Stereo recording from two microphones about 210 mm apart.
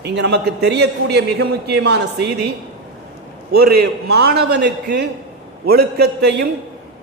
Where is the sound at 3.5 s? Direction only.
50° right (ahead or behind).